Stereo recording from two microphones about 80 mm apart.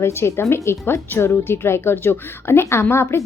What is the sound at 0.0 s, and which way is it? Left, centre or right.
Speech, left.